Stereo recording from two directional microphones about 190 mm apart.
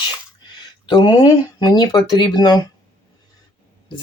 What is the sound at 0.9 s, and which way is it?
Speech, 20° left (ahead or behind).